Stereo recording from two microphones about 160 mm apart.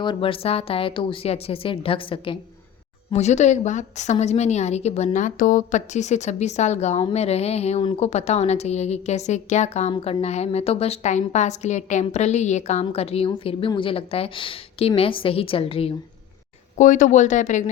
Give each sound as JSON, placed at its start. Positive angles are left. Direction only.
{"t": 0.0, "sound": "a woman's voice", "side_deg": 30}
{"t": 3.1, "sound": "a woman's voice", "side_deg": 45}
{"t": 16.7, "sound": "a woman's voice", "side_deg": 55}